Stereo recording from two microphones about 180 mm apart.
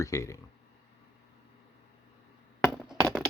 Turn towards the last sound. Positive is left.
turn(degrees=0)  # may be behind; listen again after turning